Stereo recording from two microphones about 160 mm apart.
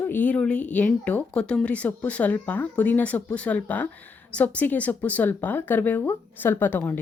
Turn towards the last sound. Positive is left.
turn(degrees=10)  # may be behind; listen again after turning